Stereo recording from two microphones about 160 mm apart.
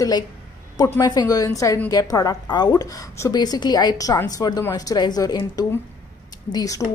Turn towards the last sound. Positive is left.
turn(degrees=25)  # may be behind; listen again after turning